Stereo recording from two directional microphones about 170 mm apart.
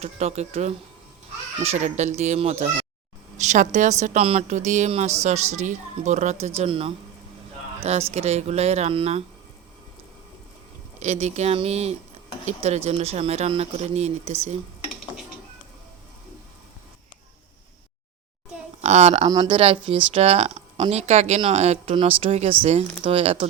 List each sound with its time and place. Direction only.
0.0 s a woman's voice: 40° right (ahead or behind)
8.1 s speech: 40° right (ahead or behind)
11.0 s speech: 40° right (ahead or behind)
18.8 s a woman's voice: 40° right (ahead or behind)